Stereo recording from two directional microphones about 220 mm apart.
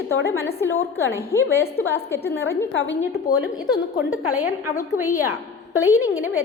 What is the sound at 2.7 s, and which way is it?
Speech, 60° left (ahead or behind).